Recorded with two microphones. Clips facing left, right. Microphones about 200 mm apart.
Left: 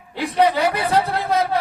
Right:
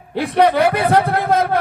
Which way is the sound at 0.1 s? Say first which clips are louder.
Right 3 dB; 55° right (ahead or behind).